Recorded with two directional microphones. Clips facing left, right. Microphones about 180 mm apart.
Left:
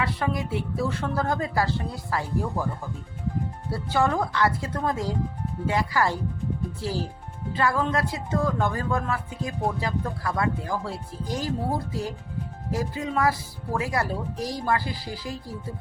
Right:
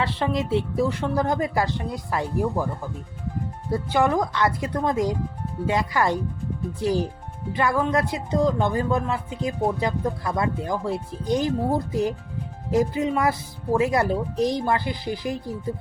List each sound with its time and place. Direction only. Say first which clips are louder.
0.0 s speech: right 3 dB; 25° right (ahead or behind)
3.7 s speech: right 3 dB; 15° right (ahead or behind)